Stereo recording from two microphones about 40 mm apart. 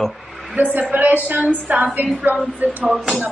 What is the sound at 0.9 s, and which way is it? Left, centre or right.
Speech, right.